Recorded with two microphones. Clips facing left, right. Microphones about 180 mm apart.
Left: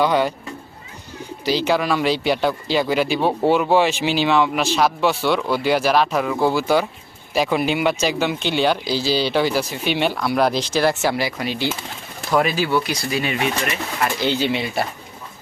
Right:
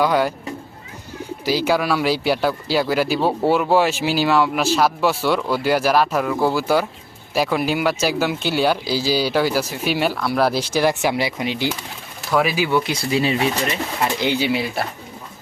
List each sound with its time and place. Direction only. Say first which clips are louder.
0.0 s speech: even; 5° right (ahead or behind)
1.5 s speech: even; 10° right (ahead or behind)
12.3 s speech: even; centre (ahead or behind)
12.5 s speech: right 1 dB; 15° right (ahead or behind)